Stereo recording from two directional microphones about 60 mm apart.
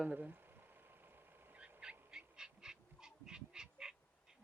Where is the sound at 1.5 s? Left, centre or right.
Centre.